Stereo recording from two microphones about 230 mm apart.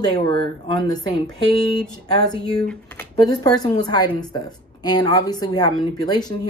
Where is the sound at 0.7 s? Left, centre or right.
Centre.